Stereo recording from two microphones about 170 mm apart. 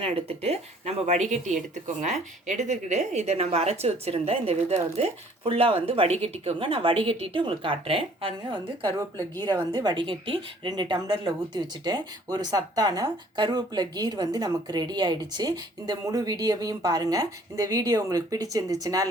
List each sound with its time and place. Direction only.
0.0 s a woman's voice: 35° right (ahead or behind)